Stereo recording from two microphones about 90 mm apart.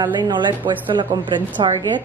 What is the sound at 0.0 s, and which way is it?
A woman's voice, 55° right (ahead or behind).